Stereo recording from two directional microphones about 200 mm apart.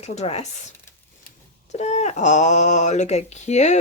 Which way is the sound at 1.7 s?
35° left (ahead or behind).